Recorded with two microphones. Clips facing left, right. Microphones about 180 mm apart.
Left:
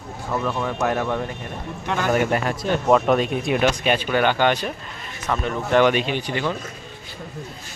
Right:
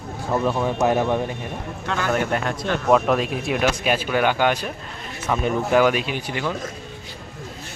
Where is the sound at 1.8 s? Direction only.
15° left (ahead or behind); by 6.5 s 5° right (ahead or behind).